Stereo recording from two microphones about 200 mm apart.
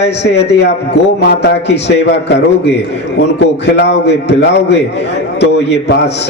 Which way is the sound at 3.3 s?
60° left (ahead or behind).